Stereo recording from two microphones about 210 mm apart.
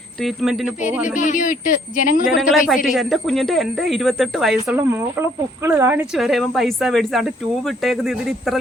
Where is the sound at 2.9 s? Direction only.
Centre (ahead or behind).